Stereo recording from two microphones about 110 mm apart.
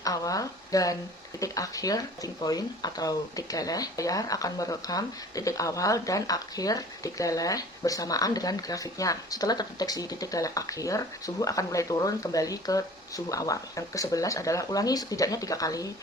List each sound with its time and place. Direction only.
0.0 s a woman's voice: 30° left (ahead or behind)